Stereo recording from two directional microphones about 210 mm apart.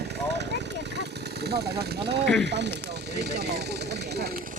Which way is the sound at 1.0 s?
50° right (ahead or behind).